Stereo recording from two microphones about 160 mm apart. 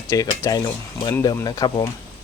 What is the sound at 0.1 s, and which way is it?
Speech, 20° left (ahead or behind).